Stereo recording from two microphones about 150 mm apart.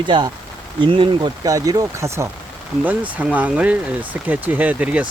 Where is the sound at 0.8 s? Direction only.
35° right (ahead or behind).